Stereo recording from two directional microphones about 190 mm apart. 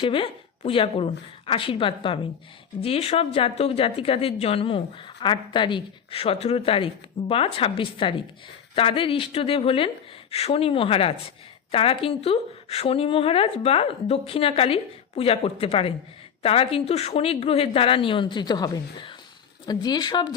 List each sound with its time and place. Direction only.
0.0 s speech: 30° left (ahead or behind)